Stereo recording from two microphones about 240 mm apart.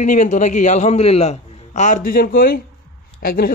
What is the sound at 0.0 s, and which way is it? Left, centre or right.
A woman's voice, left.